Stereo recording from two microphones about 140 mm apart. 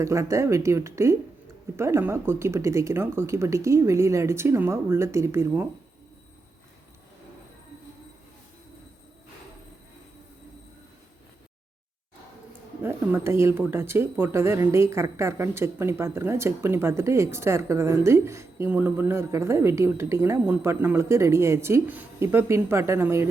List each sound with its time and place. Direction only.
0.0 s speech: 20° right (ahead or behind)
12.8 s speech: 15° right (ahead or behind)